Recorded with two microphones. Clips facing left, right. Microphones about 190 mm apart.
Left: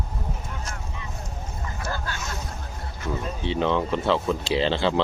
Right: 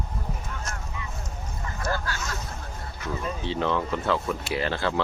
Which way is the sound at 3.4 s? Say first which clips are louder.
Left 4 dB; 20° left (ahead or behind).